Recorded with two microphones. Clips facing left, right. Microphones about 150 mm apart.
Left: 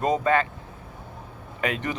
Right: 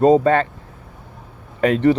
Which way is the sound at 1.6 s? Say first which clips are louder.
Right 13 dB; 35° right (ahead or behind).